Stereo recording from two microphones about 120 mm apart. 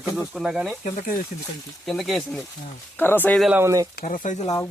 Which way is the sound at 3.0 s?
15° left (ahead or behind).